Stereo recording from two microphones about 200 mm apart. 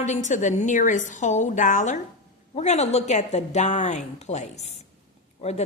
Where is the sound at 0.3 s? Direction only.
40° left (ahead or behind).